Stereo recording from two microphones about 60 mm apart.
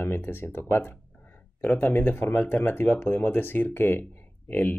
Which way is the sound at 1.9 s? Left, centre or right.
Left.